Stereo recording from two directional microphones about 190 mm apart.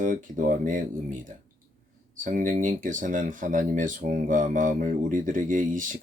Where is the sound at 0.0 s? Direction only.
45° right (ahead or behind).